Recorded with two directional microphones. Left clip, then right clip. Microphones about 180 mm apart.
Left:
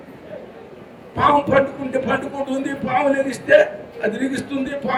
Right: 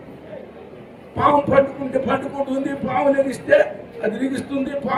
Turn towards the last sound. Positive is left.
turn(degrees=-25)  # may be behind; listen again after turning